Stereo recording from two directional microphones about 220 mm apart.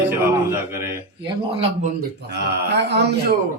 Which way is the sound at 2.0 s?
50° right (ahead or behind).